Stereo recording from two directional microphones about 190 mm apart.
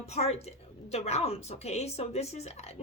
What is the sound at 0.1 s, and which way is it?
Speech, 35° left (ahead or behind).